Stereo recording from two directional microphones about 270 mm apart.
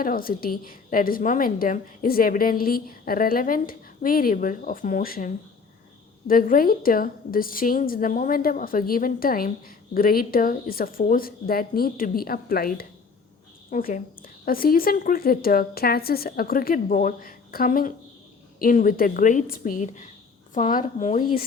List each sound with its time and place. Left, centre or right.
0.0 s a woman's voice: left